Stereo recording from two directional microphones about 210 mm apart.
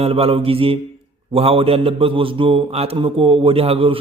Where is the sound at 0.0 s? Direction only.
25° right (ahead or behind).